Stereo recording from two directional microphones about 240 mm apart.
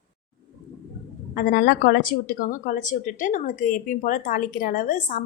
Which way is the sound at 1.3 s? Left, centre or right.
Left.